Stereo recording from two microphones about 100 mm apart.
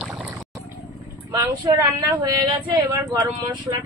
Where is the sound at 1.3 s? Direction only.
35° right (ahead or behind).